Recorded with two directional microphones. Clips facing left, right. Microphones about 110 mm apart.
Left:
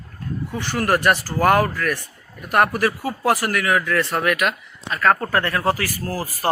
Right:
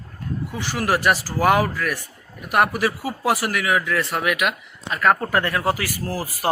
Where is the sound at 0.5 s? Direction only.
10° right (ahead or behind).